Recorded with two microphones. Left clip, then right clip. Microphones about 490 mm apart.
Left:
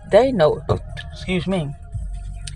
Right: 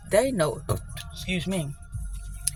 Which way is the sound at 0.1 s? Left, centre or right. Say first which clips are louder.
Left 9 dB; right.